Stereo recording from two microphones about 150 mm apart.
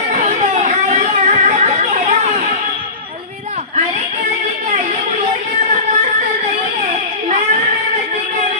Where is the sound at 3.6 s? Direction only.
50° right (ahead or behind).